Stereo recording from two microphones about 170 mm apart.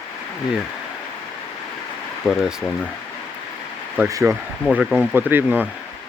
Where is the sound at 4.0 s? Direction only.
15° right (ahead or behind).